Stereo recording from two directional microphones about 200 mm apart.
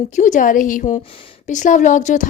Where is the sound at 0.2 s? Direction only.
40° left (ahead or behind).